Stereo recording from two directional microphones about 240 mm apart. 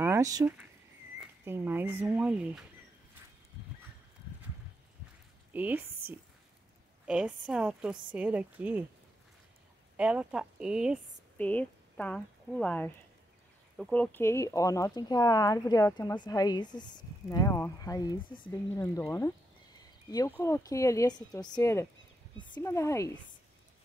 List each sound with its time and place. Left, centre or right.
0.0 s speech: centre
5.5 s speech: centre
7.1 s a woman's voice: centre
9.9 s speech: centre
18.7 s a sound: centre
20.3 s speech: centre